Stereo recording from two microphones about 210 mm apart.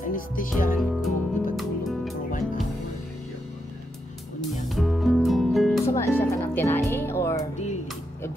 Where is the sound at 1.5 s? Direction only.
Centre (ahead or behind).